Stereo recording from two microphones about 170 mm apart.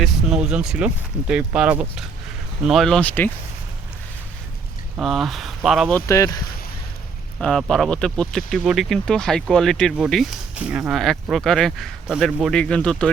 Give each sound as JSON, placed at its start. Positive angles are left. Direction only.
{"t": 0.0, "sound": "speech", "side_deg": -5}
{"t": 4.9, "sound": "speech", "side_deg": 0}
{"t": 5.9, "sound": "speech", "side_deg": 15}
{"t": 7.3, "sound": "speech", "side_deg": 5}